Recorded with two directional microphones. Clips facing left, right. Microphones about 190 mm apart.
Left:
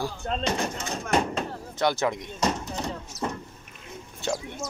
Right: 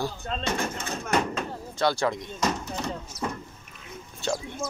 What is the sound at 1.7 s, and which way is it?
Speech, 20° left (ahead or behind).